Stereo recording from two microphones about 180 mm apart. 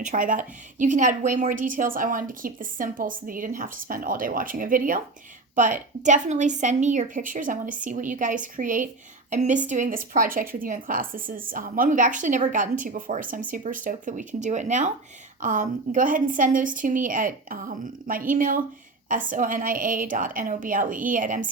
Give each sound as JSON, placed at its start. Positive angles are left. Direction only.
{"t": 0.0, "sound": "a woman's voice", "side_deg": -45}